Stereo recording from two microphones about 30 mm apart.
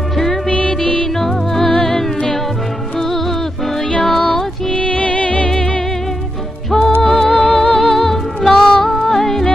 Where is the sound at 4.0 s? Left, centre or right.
Centre.